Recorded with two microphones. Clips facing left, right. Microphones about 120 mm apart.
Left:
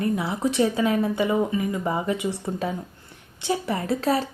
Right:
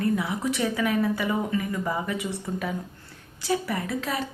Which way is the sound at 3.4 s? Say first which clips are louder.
Left 1 dB; 25° left (ahead or behind).